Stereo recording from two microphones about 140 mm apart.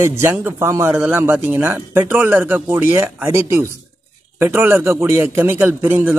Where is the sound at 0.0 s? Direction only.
15° right (ahead or behind).